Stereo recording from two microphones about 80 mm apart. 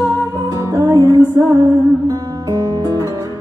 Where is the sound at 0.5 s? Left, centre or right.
Right.